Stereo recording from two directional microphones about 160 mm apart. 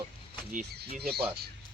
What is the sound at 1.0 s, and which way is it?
Speech, 80° right.